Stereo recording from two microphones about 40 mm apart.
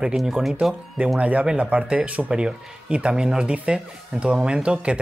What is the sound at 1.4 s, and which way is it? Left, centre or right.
Speech, right.